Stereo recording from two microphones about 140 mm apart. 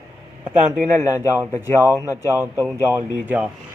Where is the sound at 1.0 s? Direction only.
25° left (ahead or behind).